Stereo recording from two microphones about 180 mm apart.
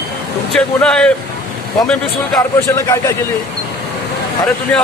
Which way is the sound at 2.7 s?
15° left (ahead or behind).